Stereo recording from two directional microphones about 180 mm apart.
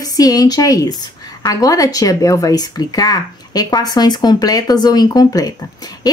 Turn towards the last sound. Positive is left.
turn(degrees=20)  # may be behind; listen again after turning